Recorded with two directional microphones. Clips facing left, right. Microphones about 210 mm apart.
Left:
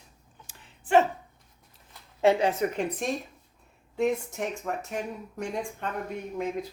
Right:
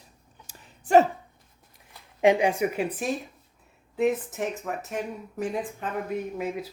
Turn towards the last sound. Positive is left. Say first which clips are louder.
# right 1 dB
turn(degrees=-5)  # may be behind; listen again after turning